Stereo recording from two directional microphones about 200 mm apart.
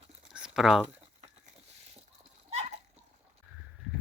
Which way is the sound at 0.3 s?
Centre (ahead or behind).